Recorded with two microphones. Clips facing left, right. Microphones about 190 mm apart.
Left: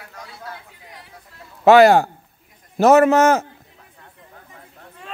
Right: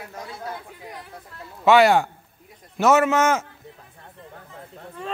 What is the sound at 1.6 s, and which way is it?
Speech, 40° left (ahead or behind).